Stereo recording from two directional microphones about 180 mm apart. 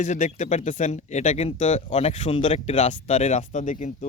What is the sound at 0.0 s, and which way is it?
Speech, 40° left (ahead or behind).